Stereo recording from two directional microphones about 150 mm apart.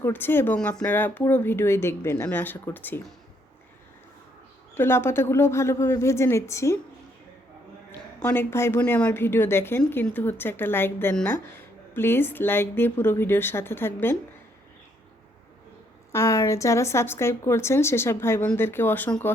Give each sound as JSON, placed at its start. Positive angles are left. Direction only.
{"t": 0.0, "sound": "a woman's voice", "side_deg": 15}
{"t": 4.7, "sound": "a woman's voice", "side_deg": 15}
{"t": 8.2, "sound": "a woman's voice", "side_deg": 15}
{"t": 16.1, "sound": "a woman's voice", "side_deg": 20}